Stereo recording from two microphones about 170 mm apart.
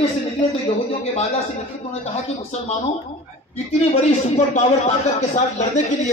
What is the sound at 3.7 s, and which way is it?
A man's voice, 40° left (ahead or behind).